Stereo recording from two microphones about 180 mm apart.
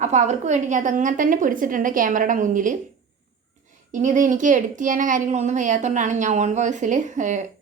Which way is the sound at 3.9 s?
45° right (ahead or behind).